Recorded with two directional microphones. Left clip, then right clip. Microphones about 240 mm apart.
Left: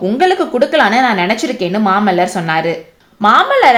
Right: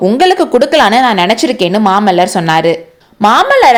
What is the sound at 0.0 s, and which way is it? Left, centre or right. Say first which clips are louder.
A woman's voice: right 4 dB; right.